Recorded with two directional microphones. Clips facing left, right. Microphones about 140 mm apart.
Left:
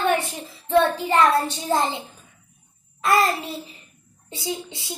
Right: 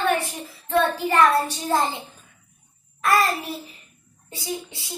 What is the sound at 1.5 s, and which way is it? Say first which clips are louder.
Speech: even; 25° left (ahead or behind).